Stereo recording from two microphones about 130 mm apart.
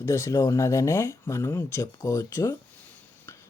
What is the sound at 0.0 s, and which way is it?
Speech, 20° left (ahead or behind).